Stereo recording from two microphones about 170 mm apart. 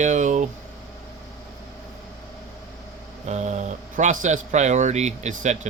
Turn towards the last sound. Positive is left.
turn(degrees=-45)  # may be behind; listen again after turning